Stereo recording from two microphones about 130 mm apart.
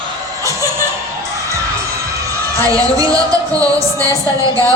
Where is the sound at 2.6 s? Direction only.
25° right (ahead or behind).